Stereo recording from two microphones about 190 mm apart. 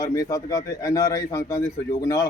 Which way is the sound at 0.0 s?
15° left (ahead or behind).